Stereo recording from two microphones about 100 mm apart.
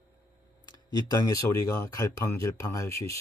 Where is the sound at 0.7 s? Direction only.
40° left (ahead or behind).